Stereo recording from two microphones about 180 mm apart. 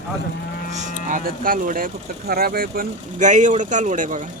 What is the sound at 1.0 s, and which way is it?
Speech, 50° right (ahead or behind).